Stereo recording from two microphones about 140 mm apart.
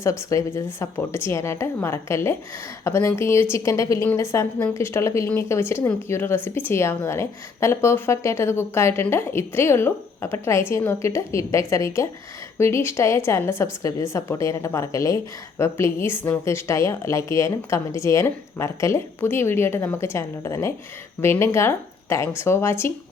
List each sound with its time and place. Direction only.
0.0 s a woman's voice: 20° left (ahead or behind)